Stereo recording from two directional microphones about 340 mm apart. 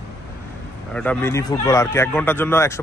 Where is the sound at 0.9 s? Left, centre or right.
Centre.